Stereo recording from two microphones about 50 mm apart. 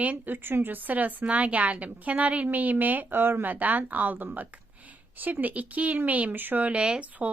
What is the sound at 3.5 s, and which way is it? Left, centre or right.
A woman's voice, right.